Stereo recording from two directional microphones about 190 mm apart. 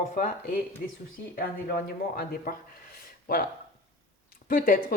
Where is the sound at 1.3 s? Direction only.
50° left (ahead or behind).